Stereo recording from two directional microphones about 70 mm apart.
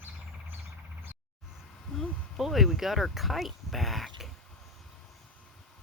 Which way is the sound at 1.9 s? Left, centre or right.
Centre.